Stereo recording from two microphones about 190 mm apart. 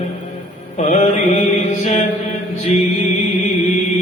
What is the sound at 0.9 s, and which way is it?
Mantra, 40° left (ahead or behind).